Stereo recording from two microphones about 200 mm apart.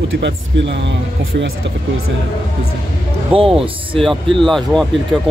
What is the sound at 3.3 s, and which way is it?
Speech, 30° right (ahead or behind).